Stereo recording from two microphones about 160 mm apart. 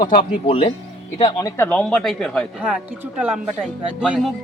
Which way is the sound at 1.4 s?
10° left (ahead or behind).